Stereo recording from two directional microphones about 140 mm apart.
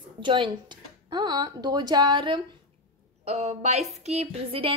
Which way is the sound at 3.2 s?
50° right (ahead or behind).